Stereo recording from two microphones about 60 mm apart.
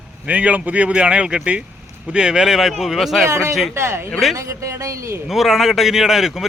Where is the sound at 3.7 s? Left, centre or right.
Right.